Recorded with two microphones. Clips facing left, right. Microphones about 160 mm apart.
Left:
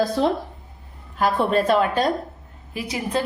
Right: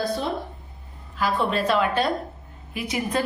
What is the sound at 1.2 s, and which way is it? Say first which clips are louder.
A woman's voice: left 4 dB; 50° left (ahead or behind).